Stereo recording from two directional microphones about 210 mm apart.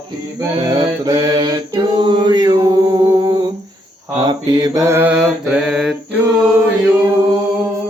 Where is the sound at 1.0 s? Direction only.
20° right (ahead or behind).